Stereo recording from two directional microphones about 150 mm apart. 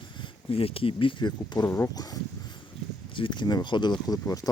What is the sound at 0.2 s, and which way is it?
Speech, 40° left (ahead or behind).